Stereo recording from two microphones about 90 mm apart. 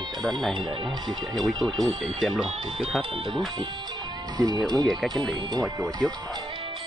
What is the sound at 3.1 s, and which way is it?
Speech, 70° right (ahead or behind).